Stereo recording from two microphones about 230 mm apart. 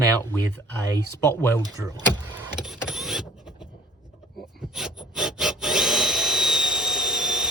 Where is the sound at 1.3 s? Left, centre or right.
Centre.